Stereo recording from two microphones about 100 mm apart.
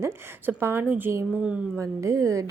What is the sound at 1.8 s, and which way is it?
Speech, 30° right (ahead or behind).